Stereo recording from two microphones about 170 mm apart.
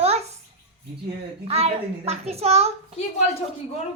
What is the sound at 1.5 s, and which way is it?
Speech, 40° right (ahead or behind).